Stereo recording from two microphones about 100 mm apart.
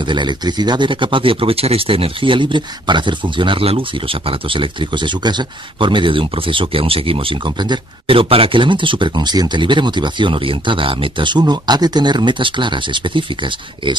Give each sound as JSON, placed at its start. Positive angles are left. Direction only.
{"t": 0.0, "sound": "speech", "side_deg": -50}
{"t": 8.1, "sound": "speech", "side_deg": -65}